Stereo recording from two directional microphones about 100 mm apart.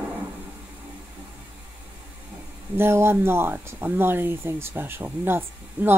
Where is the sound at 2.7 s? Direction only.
25° right (ahead or behind).